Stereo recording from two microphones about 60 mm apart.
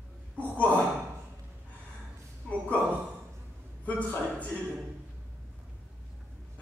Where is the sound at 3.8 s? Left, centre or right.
Left.